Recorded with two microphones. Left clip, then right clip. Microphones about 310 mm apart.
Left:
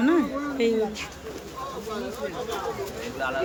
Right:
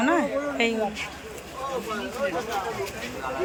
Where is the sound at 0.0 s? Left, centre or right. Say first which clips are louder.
Right 1 dB; centre.